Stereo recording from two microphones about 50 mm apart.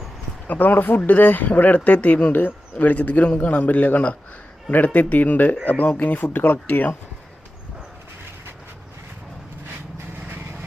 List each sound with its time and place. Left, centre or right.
0.4 s speech: left